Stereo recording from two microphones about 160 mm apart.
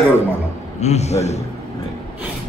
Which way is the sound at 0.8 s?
45° left (ahead or behind).